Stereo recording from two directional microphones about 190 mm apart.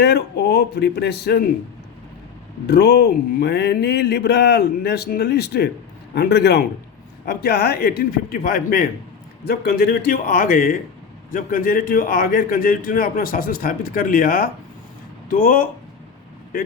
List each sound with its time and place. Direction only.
0.0 s speech: 60° left (ahead or behind)
2.6 s speech: 60° left (ahead or behind)